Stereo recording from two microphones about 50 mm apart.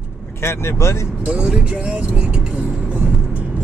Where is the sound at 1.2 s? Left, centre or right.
Right.